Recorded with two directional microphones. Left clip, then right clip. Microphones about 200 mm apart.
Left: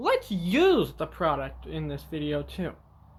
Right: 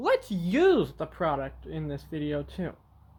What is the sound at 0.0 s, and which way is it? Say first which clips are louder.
Speech: even; 25° right (ahead or behind).